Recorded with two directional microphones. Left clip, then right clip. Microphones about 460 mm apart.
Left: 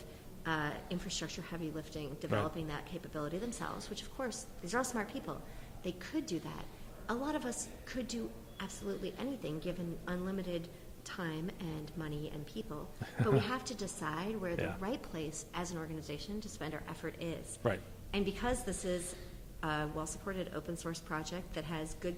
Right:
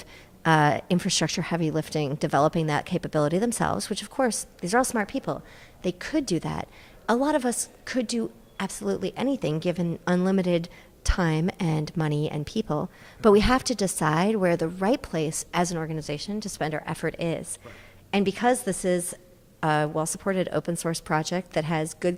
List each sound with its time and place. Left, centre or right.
0.4 s a woman's voice: right